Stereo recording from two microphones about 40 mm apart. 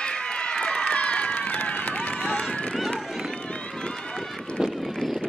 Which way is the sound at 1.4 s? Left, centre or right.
Left.